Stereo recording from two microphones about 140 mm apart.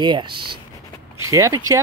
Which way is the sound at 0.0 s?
35° right (ahead or behind).